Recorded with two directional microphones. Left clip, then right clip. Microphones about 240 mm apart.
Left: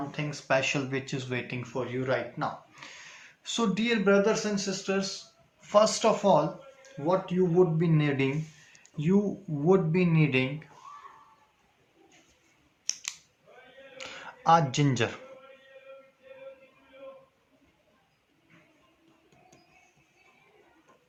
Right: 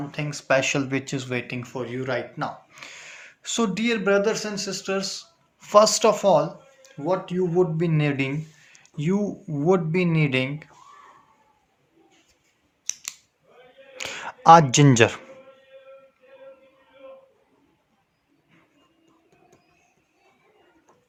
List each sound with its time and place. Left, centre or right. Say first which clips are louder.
0.1 s speech: right 6 dB; right
12.9 s scissors: right 2 dB; centre
14.0 s speech: right 10 dB; right